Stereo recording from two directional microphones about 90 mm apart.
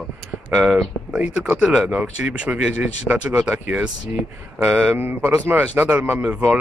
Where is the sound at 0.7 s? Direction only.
15° right (ahead or behind).